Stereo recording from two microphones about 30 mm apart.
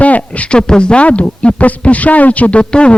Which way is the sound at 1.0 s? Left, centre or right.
Left.